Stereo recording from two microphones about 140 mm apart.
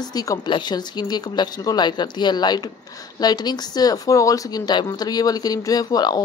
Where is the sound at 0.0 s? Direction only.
25° left (ahead or behind).